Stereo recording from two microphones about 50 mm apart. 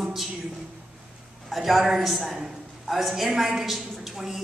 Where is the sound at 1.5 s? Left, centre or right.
Centre.